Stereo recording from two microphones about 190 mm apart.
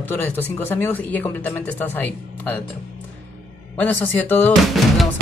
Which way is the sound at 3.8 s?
10° left (ahead or behind).